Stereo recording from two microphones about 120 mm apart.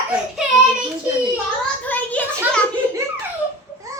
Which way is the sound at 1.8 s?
15° left (ahead or behind).